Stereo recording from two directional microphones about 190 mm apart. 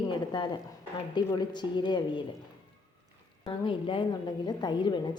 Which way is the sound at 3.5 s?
25° left (ahead or behind).